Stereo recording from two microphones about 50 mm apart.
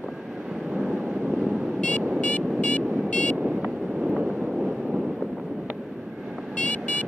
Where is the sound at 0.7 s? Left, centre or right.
Centre.